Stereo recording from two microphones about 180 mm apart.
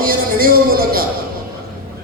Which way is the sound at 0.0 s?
55° right (ahead or behind).